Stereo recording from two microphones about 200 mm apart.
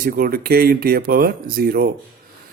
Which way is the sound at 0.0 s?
45° right (ahead or behind).